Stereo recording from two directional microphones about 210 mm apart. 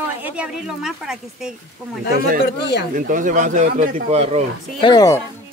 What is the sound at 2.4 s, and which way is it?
Speech, 50° left (ahead or behind).